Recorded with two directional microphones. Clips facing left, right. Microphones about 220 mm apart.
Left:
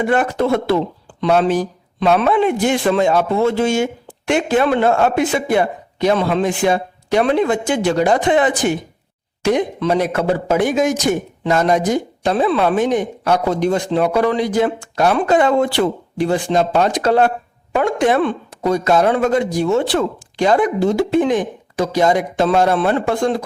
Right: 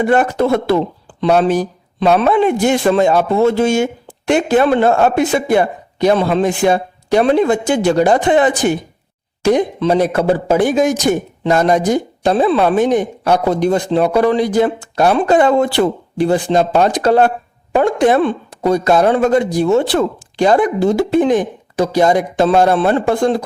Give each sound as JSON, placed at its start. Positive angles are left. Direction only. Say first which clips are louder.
{"t": 0.1, "sound": "speech", "louder": "right 2 dB", "side_deg": -40}